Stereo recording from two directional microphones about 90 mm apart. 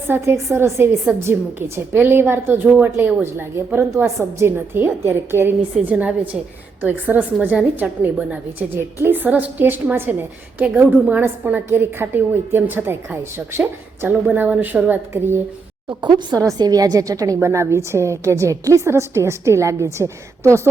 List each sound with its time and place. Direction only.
0.1 s a woman's voice: 30° right (ahead or behind)
16.0 s a woman's voice: 55° right (ahead or behind); by 20.6 s 30° right (ahead or behind)